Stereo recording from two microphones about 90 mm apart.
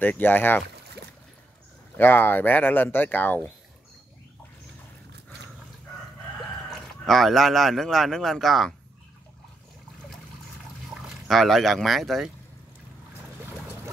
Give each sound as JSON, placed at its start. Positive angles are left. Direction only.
{"t": 0.0, "sound": "speech", "side_deg": 20}
{"t": 2.0, "sound": "speech", "side_deg": 25}
{"t": 6.7, "sound": "speech", "side_deg": 5}
{"t": 11.0, "sound": "speech", "side_deg": 0}